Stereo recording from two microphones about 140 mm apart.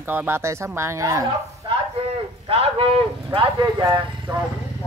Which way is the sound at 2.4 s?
40° right (ahead or behind).